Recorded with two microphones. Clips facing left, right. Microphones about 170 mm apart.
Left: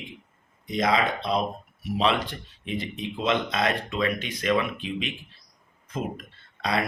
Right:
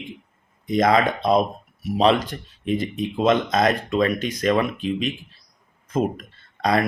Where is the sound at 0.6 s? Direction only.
50° right (ahead or behind).